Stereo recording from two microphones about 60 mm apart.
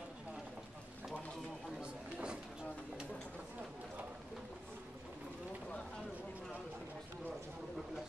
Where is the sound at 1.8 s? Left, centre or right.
Centre.